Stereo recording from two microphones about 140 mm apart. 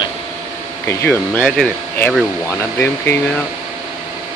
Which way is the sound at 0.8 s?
15° left (ahead or behind).